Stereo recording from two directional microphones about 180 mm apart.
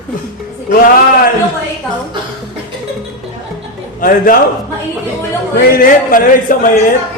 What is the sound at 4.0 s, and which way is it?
Speech, 50° left (ahead or behind).